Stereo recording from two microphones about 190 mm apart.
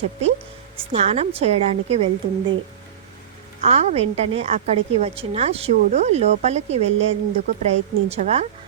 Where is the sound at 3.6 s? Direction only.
35° right (ahead or behind).